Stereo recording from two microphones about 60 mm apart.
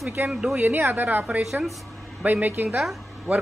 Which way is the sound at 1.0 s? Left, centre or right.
Right.